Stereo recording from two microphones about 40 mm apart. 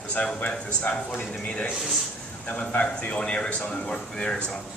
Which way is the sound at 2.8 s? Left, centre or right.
Left.